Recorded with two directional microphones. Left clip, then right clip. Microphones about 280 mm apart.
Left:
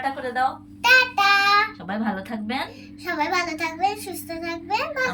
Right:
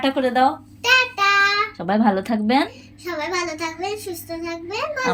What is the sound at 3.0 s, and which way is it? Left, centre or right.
A child's voice, centre.